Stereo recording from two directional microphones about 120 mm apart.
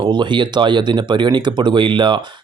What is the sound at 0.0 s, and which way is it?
Speech, 40° right (ahead or behind).